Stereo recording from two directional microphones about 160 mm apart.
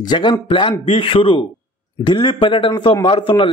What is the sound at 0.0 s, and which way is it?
A man's voice, 30° left (ahead or behind).